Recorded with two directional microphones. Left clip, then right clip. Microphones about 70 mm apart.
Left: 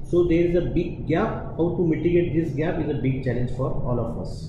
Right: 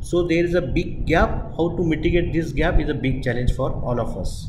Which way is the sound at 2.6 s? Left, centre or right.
Right.